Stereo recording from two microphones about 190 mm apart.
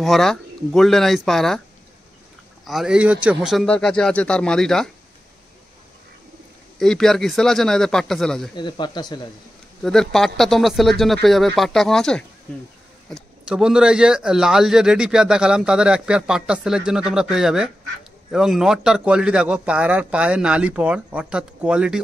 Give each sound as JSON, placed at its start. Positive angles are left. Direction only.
{"t": 0.0, "sound": "a man's voice", "side_deg": 0}
{"t": 2.6, "sound": "a man's voice", "side_deg": 0}
{"t": 6.8, "sound": "a man's voice", "side_deg": 0}
{"t": 8.5, "sound": "speech", "side_deg": 25}
{"t": 9.8, "sound": "a man's voice", "side_deg": 0}